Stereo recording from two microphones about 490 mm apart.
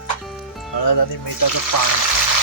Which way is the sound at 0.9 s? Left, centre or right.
Left.